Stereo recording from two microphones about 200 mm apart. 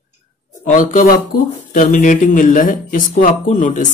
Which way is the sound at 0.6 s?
40° left (ahead or behind).